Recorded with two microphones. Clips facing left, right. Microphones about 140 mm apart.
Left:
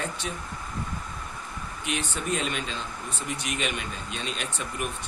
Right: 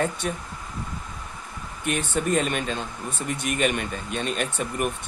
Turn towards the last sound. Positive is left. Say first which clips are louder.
# right 6 dB
turn(degrees=-50)  # may be behind; listen again after turning